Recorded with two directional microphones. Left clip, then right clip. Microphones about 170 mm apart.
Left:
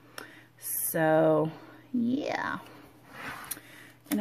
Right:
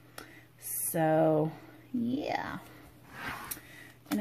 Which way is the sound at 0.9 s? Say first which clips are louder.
Left 3 dB; 25° left (ahead or behind).